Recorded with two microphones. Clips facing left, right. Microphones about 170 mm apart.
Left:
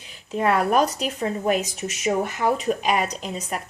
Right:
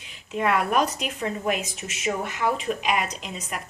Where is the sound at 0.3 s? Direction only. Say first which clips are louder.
Left 3 dB; 35° left (ahead or behind).